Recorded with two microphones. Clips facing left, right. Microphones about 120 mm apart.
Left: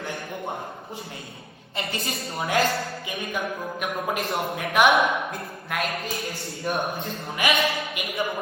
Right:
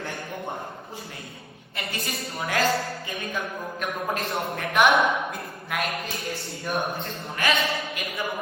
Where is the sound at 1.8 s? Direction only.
25° left (ahead or behind).